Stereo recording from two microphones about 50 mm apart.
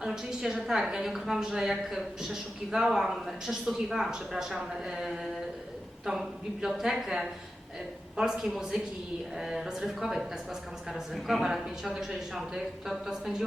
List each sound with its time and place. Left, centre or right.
0.0 s a woman's voice: centre